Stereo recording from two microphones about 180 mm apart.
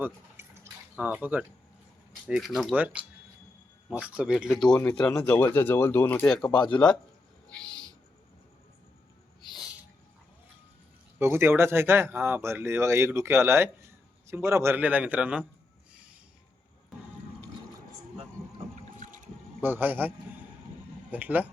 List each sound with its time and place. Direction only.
0.0 s drip: 10° right (ahead or behind)
2.2 s speech: centre (ahead or behind)
7.4 s owl: 5° left (ahead or behind)
11.2 s speech: 15° right (ahead or behind)
18.9 s a sound: 45° right (ahead or behind)
19.6 s speech: 10° right (ahead or behind)